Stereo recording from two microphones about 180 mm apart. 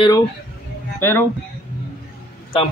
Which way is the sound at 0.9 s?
15° left (ahead or behind).